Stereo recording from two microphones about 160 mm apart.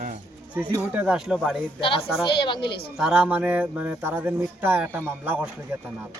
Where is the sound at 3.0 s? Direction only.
5° right (ahead or behind).